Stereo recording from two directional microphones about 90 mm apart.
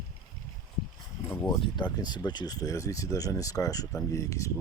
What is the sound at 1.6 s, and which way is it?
Speech, 55° left (ahead or behind).